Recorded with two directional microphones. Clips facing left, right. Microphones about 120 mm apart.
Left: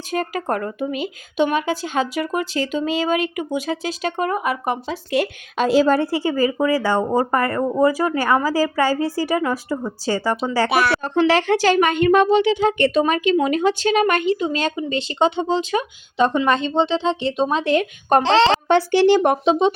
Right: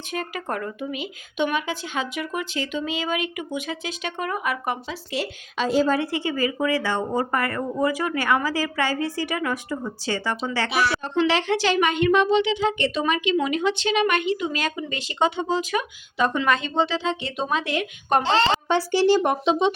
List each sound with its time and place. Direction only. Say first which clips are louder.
0.1 s speech: left 6 dB; 40° left (ahead or behind)
5.1 s speech: left 7 dB; 60° left (ahead or behind); by 6.0 s 85° left
6.0 s speech: left 5 dB; 35° left (ahead or behind)
10.7 s speech: left 5 dB; 60° left (ahead or behind); by 18.2 s 35° left (ahead or behind)
18.2 s speech: left 5 dB; 90° left; by 19.4 s 60° left (ahead or behind)
19.5 s speech: left 3 dB; 35° left (ahead or behind)